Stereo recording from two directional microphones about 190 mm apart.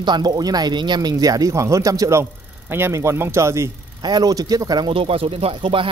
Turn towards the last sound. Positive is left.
turn(degrees=-25)  # may be behind; listen again after turning